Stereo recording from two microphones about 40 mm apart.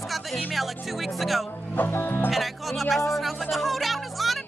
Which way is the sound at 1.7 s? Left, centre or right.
Left.